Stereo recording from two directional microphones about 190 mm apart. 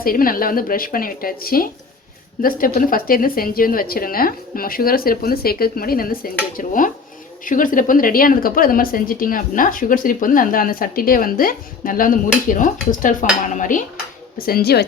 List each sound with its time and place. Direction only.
0.0 s speech: 50° left (ahead or behind)